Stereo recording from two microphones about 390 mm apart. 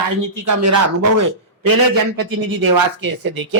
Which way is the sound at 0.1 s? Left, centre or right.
Right.